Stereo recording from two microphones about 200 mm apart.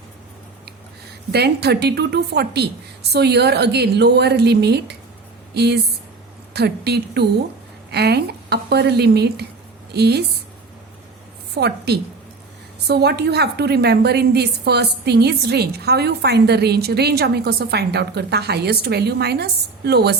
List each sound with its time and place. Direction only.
1.3 s a woman's voice: 55° right (ahead or behind)
11.5 s a woman's voice: 55° right (ahead or behind)